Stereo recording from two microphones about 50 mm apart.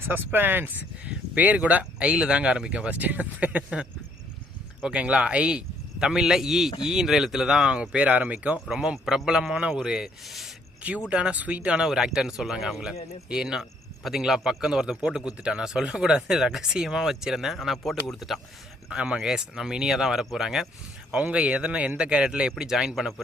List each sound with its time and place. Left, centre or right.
0.0 s speech: right
1.0 s speech: right
2.9 s speech: right
4.8 s a man's voice: right
7.7 s speech: right
8.7 s a man's voice: centre
11.1 s speech: right
11.8 s a man's voice: centre
18.9 s a man's voice: right
21.1 s speech: right
23.0 s speech: centre